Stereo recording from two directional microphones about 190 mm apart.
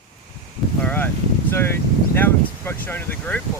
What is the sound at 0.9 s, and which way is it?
Speech, 10° left (ahead or behind).